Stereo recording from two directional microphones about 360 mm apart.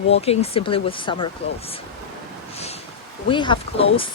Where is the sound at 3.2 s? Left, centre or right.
Centre.